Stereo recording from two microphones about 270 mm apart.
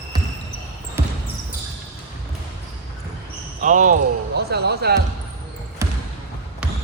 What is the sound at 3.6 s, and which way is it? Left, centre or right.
Speech, right.